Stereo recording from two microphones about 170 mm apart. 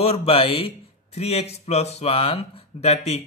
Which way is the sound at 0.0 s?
35° left (ahead or behind).